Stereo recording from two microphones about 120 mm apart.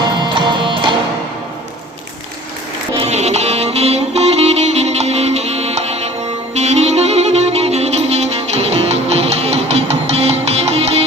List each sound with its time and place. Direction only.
0.0 s music: 40° right (ahead or behind)
3.0 s music: 65° right (ahead or behind)